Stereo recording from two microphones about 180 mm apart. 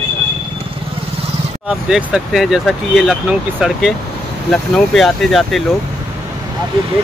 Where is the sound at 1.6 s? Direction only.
5° right (ahead or behind).